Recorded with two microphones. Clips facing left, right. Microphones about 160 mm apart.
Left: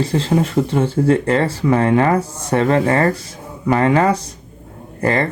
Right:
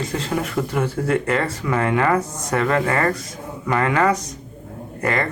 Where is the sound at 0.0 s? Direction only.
30° left (ahead or behind).